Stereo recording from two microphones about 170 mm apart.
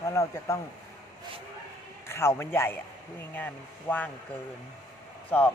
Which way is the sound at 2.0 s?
15° left (ahead or behind).